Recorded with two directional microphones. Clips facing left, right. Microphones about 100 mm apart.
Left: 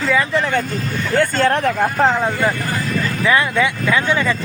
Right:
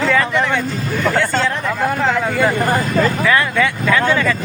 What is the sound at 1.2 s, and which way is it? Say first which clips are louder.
Speech: left 3 dB; 55° left (ahead or behind).